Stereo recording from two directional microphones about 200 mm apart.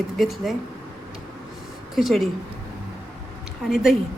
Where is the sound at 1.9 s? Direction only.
Centre (ahead or behind).